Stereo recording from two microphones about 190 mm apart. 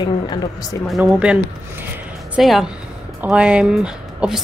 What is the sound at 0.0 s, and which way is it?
Speech, 25° left (ahead or behind).